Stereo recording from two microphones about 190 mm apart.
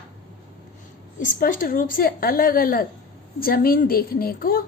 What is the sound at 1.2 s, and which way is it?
A woman's voice, 45° left (ahead or behind).